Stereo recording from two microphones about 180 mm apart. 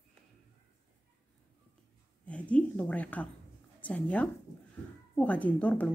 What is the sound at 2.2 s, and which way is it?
Speech, 5° left (ahead or behind).